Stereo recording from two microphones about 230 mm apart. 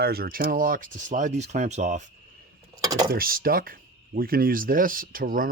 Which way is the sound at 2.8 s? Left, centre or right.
Centre.